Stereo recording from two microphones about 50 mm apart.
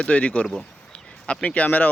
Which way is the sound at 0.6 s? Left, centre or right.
Left.